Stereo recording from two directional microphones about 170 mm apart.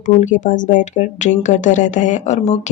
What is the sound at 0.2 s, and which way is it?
Speech, 50° left (ahead or behind).